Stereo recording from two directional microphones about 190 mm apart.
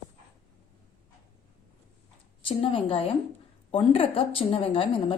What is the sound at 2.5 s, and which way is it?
A woman's voice, 30° left (ahead or behind).